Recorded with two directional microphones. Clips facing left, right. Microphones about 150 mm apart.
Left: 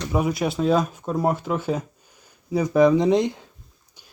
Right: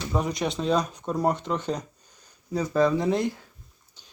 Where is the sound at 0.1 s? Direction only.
5° left (ahead or behind).